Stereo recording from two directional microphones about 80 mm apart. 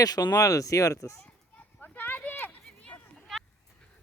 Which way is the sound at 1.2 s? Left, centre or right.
Centre.